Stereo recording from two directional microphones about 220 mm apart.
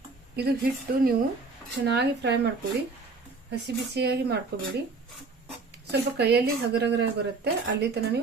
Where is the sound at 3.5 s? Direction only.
50° right (ahead or behind).